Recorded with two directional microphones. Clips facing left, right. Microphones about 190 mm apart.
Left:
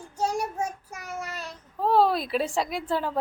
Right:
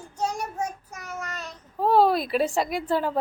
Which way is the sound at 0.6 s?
30° left (ahead or behind).